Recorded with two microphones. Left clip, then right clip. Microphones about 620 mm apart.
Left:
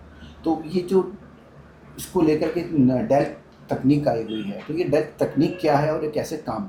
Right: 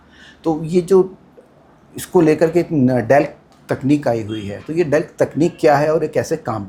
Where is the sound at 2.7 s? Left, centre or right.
Right.